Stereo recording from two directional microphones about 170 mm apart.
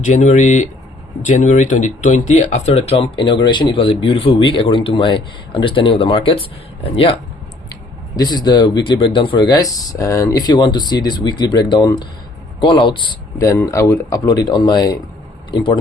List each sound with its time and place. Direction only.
0.0 s speech: 45° left (ahead or behind); by 15.8 s 30° left (ahead or behind)